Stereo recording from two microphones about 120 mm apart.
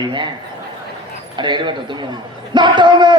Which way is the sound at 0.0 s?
40° right (ahead or behind).